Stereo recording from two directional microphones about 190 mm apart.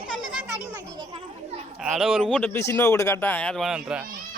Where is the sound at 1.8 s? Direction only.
Centre (ahead or behind).